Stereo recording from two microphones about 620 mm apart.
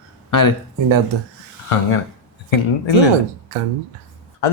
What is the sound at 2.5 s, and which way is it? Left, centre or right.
Speech, left.